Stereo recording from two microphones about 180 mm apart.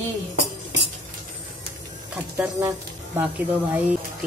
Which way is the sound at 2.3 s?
10° right (ahead or behind).